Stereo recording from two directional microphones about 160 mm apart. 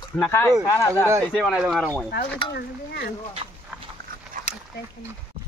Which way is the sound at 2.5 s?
85° left.